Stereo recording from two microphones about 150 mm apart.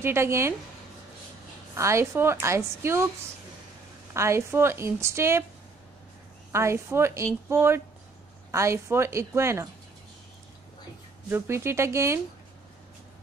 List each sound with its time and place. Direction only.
0.0 s a woman's voice: 15° right (ahead or behind)
1.8 s a woman's voice: 20° right (ahead or behind)
4.1 s a woman's voice: 20° right (ahead or behind)
6.5 s a woman's voice: 20° right (ahead or behind)
11.2 s a woman's voice: 15° right (ahead or behind)